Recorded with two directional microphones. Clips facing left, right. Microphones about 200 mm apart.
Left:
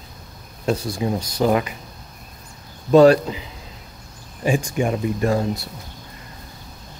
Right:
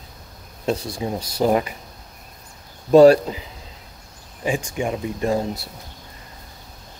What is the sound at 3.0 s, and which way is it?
Speech, 35° right (ahead or behind).